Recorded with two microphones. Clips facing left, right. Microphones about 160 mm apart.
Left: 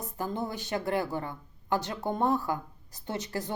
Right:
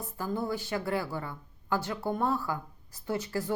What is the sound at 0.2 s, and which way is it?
Speech, 20° left (ahead or behind).